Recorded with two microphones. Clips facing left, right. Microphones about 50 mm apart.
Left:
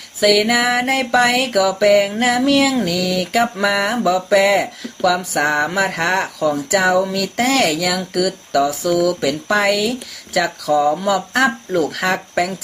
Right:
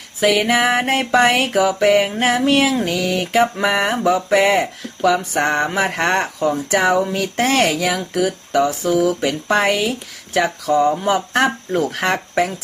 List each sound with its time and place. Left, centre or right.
0.2 s speech: right